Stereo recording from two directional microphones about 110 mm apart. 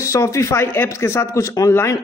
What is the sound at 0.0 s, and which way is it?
Speech, 30° left (ahead or behind).